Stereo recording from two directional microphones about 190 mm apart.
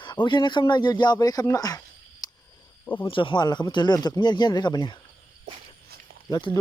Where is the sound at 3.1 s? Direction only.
25° left (ahead or behind).